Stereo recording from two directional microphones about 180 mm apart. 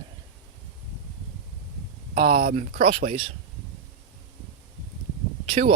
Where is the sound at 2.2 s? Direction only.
45° right (ahead or behind).